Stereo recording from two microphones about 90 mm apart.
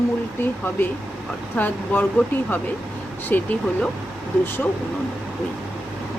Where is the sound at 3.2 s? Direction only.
20° left (ahead or behind).